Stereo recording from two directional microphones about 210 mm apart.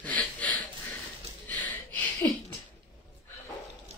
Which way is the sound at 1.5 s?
5° left (ahead or behind).